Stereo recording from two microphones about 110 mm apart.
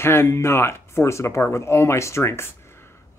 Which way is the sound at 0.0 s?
20° left (ahead or behind).